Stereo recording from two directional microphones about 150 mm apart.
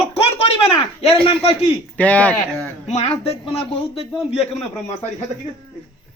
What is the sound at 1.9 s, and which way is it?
Speech, 10° left (ahead or behind).